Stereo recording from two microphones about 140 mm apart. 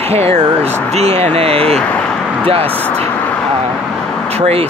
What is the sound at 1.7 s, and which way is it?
Speech, 5° left (ahead or behind).